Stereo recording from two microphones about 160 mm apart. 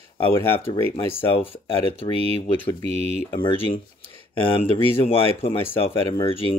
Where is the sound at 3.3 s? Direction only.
30° left (ahead or behind).